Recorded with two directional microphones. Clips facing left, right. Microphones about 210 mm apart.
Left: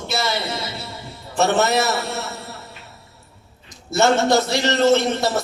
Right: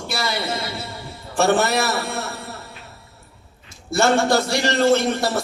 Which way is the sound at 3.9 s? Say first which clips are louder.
Left 1 dB; 20° left (ahead or behind).